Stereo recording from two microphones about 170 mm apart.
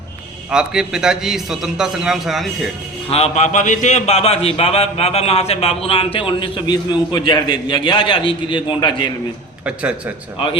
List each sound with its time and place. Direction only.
0.5 s a man's voice: 5° right (ahead or behind)
3.1 s a man's voice: 40° left (ahead or behind)
10.3 s a man's voice: 30° left (ahead or behind)